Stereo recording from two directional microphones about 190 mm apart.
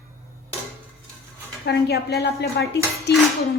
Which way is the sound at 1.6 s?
60° left (ahead or behind).